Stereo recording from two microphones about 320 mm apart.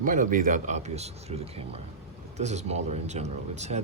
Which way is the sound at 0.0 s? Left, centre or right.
Right.